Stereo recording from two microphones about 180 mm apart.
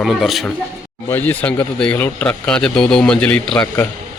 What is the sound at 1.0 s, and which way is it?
A man's voice, 10° left (ahead or behind).